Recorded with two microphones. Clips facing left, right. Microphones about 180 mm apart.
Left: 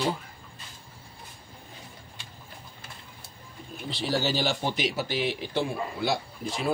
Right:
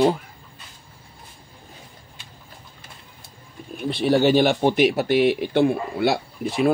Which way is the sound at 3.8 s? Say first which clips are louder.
Right 10 dB; 60° right (ahead or behind).